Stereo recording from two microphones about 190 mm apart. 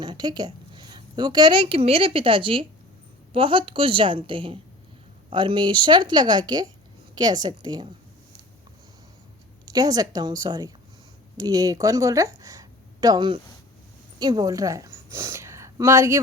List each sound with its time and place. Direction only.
0.0 s speech: 20° right (ahead or behind)
9.6 s a woman's voice: 20° right (ahead or behind)